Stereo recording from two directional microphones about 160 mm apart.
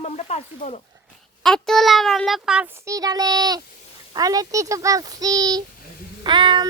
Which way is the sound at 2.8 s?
20° right (ahead or behind).